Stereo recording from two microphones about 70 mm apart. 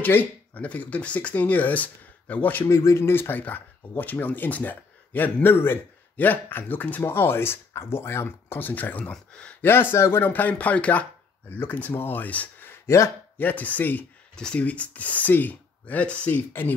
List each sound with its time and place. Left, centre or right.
0.0 s speech: left
2.6 s speech: left
9.1 s speech: centre
9.6 s a man's voice: left
10.2 s speech: left
12.8 s speech: left
13.4 s speech: left
14.3 s speech: centre